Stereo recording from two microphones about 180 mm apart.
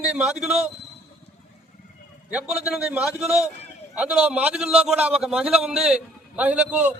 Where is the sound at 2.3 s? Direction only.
5° right (ahead or behind).